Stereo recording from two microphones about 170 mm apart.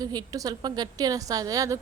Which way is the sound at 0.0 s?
20° right (ahead or behind).